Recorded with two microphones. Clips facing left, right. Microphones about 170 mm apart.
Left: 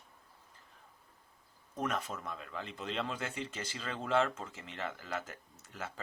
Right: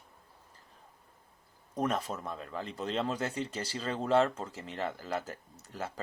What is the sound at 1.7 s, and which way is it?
Speech, 35° right (ahead or behind).